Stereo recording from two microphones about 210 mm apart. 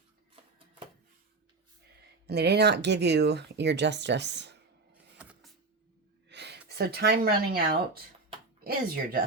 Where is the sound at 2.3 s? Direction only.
50° right (ahead or behind).